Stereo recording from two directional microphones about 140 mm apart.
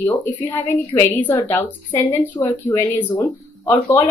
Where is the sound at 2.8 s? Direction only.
10° left (ahead or behind).